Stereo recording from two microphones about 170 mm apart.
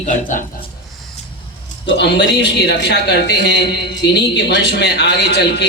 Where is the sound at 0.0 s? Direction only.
50° left (ahead or behind).